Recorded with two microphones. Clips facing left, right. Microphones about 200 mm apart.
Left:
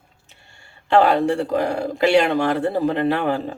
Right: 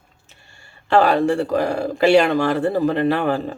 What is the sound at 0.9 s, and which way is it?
Speech, 20° left (ahead or behind).